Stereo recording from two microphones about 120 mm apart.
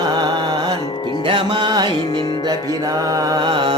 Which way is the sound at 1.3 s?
40° right (ahead or behind).